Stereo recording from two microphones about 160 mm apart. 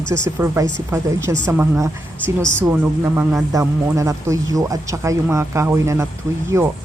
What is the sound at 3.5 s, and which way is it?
Speech, 20° right (ahead or behind).